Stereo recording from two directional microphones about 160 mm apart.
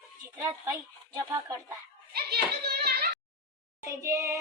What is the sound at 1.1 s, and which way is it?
Speech, 20° right (ahead or behind).